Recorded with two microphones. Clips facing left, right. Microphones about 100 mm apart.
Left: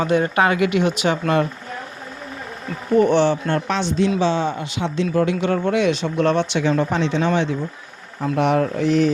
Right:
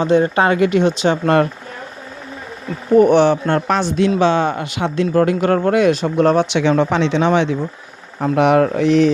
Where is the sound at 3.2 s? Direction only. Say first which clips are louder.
Right 4 dB; 55° right (ahead or behind).